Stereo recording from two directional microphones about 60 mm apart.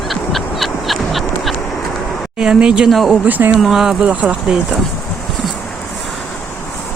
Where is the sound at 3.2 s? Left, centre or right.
Right.